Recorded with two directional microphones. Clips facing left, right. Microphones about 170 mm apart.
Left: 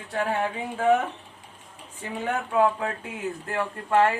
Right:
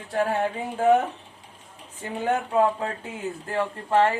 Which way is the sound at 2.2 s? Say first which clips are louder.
Right 1 dB; 30° right (ahead or behind).